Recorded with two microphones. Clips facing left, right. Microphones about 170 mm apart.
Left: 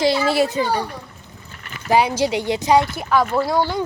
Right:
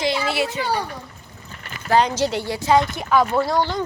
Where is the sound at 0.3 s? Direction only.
40° left (ahead or behind).